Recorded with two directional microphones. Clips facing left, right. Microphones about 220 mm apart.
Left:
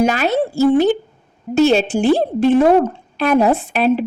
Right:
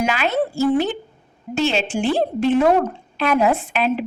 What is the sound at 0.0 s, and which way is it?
A woman's voice, 40° left (ahead or behind).